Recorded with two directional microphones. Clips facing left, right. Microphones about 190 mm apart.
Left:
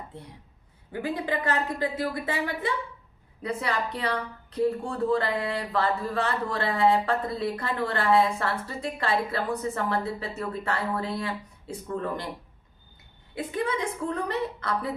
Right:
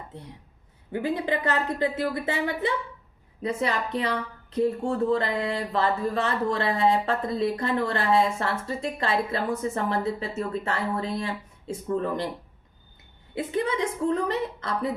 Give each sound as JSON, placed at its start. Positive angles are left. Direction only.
{"t": 1.0, "sound": "speech", "side_deg": -25}
{"t": 13.3, "sound": "speech", "side_deg": -25}